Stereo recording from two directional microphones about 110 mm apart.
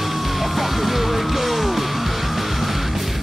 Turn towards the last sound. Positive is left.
turn(degrees=0)  # may be behind; listen again after turning